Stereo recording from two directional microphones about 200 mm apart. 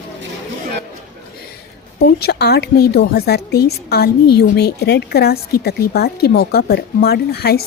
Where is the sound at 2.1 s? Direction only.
50° left (ahead or behind).